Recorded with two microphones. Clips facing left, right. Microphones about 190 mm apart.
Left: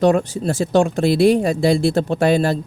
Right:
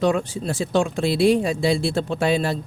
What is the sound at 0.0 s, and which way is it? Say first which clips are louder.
Speech: left 5 dB; 45° left (ahead or behind).